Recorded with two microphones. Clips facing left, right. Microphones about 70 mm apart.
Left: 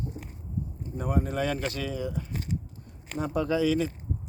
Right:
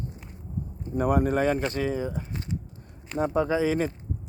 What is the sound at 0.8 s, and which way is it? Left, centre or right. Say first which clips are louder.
Speech: right 7 dB; right.